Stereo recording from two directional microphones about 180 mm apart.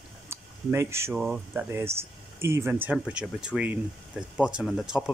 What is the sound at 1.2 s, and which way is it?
Speech, 5° right (ahead or behind).